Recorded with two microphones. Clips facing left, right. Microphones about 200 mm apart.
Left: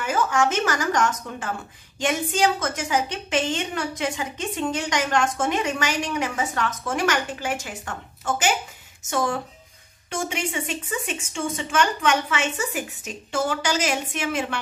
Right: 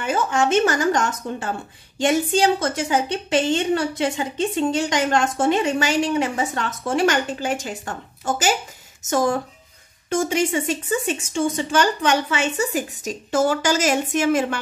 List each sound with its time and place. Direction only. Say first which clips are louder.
0.0 s a woman's voice: right 1 dB; 25° right (ahead or behind); by 14.6 s 45° right (ahead or behind)